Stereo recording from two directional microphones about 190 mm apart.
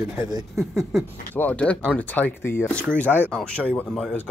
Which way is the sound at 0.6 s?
Centre (ahead or behind).